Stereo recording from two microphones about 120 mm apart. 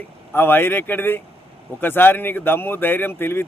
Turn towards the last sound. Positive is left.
turn(degrees=20)  # may be behind; listen again after turning